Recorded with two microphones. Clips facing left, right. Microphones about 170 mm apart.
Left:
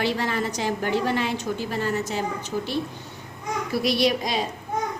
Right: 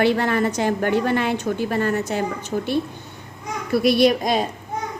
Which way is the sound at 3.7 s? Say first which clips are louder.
Right 6 dB; 55° right (ahead or behind).